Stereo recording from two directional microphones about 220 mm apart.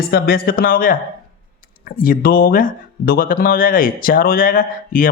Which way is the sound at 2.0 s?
40° left (ahead or behind).